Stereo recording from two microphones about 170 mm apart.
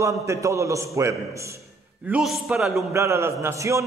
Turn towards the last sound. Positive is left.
turn(degrees=-15)  # may be behind; listen again after turning